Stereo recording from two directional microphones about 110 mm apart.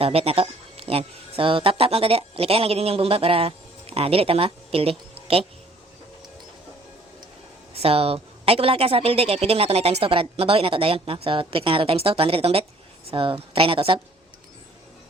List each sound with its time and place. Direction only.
0.0 s speech: 60° right (ahead or behind)
7.7 s a woman's voice: 65° right (ahead or behind)